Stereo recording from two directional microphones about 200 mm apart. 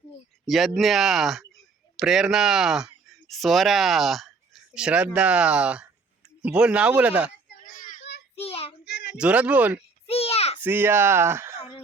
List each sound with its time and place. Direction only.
0.4 s speech: centre (ahead or behind)
7.6 s child singing: 40° left (ahead or behind)
8.4 s child singing: 30° left (ahead or behind)
8.8 s a sound: 60° left (ahead or behind)
9.1 s speech: 5° right (ahead or behind)
10.1 s a sound: 30° left (ahead or behind)
10.6 s speech: 10° right (ahead or behind)